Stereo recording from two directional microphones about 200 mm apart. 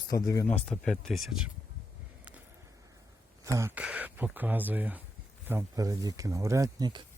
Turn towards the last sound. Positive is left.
turn(degrees=-20)  # may be behind; listen again after turning